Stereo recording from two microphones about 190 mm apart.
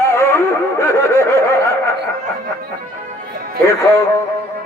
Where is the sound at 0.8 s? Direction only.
15° left (ahead or behind).